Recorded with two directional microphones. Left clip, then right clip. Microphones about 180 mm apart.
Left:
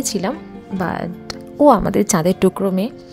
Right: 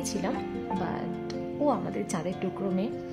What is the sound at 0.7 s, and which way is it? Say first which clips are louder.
Speech: left 13 dB; 45° left (ahead or behind).